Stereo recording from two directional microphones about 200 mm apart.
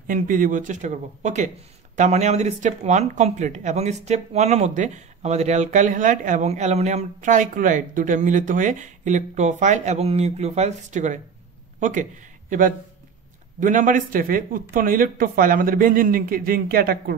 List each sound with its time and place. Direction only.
0.0 s speech: 40° right (ahead or behind)